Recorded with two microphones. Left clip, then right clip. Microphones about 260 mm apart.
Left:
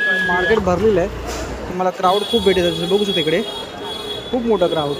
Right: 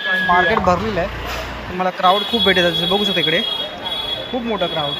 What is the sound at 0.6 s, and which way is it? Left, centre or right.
Speech, centre.